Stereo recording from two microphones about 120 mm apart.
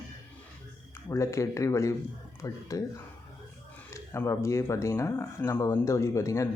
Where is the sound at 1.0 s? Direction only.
25° left (ahead or behind).